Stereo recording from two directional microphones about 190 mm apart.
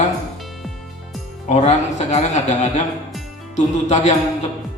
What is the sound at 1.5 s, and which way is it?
Speech, 35° left (ahead or behind).